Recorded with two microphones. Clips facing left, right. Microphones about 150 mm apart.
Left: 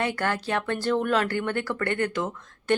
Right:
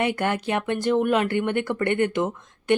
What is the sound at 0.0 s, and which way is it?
Speech, 20° right (ahead or behind).